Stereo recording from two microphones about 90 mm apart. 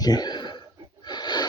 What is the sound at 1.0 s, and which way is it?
Snort, 50° left (ahead or behind).